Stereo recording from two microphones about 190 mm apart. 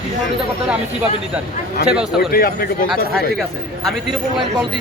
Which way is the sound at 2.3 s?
55° left (ahead or behind).